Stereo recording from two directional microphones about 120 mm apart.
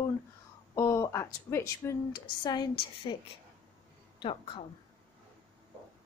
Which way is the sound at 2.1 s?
35° left (ahead or behind).